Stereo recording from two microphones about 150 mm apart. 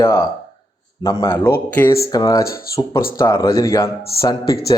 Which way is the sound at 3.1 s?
20° left (ahead or behind).